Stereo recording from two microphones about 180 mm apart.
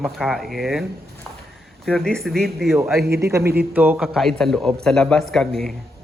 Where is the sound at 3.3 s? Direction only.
15° right (ahead or behind); by 5.7 s centre (ahead or behind).